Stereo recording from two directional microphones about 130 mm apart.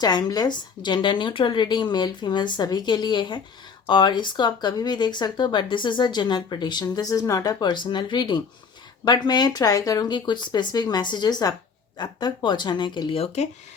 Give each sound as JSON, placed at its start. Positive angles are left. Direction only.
{"t": 0.0, "sound": "speech", "side_deg": 30}